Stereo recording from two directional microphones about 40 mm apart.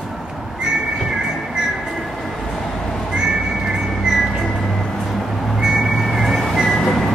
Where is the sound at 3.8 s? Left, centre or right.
Centre.